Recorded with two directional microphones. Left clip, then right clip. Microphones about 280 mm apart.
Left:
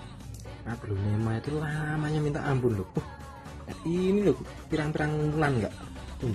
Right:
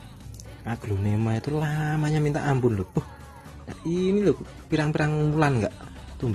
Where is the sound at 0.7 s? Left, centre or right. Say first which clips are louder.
Right 5 dB; centre.